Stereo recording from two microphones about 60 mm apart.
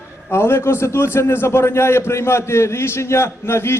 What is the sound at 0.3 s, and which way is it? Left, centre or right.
A man's voice, left.